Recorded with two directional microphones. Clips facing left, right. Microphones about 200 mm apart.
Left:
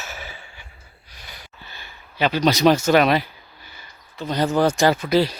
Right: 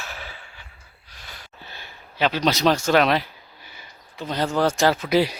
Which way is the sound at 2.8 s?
5° left (ahead or behind).